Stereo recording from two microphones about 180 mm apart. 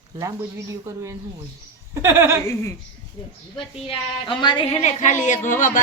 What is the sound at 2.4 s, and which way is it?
Bird, 15° left (ahead or behind).